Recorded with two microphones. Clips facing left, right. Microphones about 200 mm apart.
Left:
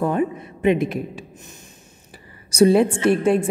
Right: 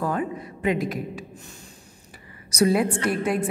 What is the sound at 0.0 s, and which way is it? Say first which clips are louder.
A woman's voice: left 5 dB; 25° left (ahead or behind).